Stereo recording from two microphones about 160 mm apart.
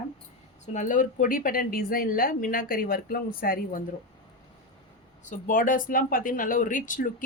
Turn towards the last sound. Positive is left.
turn(degrees=55)  # may be behind; listen again after turning